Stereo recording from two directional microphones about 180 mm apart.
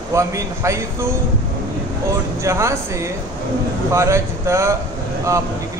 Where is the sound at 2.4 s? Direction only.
15° right (ahead or behind).